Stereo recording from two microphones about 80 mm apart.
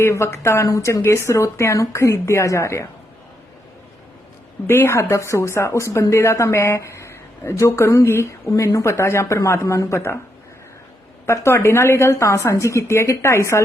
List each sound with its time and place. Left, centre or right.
0.0 s speech: left
4.7 s speech: left
11.3 s speech: left